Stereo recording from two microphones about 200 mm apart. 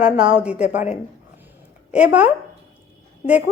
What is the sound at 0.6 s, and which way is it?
Speech, 35° left (ahead or behind).